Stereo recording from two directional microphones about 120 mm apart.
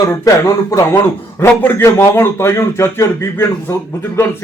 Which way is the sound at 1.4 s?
15° left (ahead or behind).